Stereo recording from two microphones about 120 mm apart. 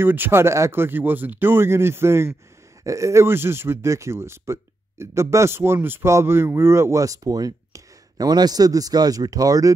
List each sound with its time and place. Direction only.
0.0 s speech: 15° right (ahead or behind)